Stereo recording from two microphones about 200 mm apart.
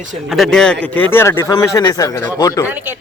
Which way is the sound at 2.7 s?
10° right (ahead or behind).